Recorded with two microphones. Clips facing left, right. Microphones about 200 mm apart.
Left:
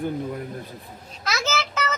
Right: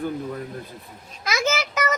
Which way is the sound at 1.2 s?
15° right (ahead or behind).